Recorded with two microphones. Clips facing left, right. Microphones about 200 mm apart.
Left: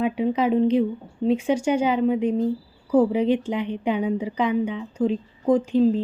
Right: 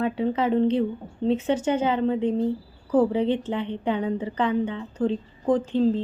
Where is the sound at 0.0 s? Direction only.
15° left (ahead or behind).